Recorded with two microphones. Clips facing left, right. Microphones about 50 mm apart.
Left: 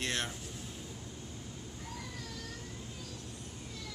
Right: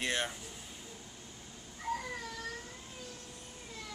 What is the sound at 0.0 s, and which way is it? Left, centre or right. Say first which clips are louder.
Speech: right 2 dB; centre.